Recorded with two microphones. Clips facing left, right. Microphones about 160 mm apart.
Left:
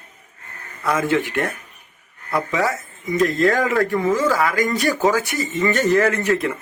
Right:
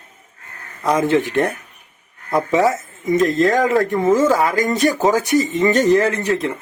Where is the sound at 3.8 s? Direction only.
25° right (ahead or behind).